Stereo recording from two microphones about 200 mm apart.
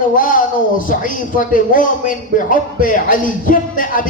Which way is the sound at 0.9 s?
45° left (ahead or behind).